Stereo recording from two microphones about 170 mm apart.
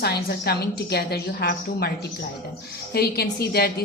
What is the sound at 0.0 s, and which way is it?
A woman's voice, 65° left (ahead or behind).